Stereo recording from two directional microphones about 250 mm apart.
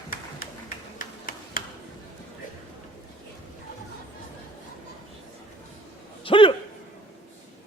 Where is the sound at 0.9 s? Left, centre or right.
Left.